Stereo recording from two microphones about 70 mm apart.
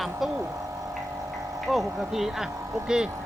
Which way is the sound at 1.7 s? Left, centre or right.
Centre.